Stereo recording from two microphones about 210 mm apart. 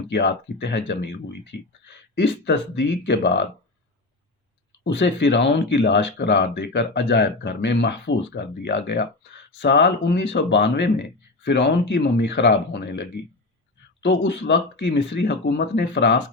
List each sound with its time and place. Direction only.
0.1 s speech: 55° left (ahead or behind)
4.8 s speech: 60° left (ahead or behind)